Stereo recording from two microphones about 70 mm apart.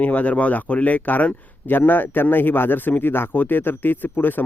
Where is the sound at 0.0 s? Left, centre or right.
Left.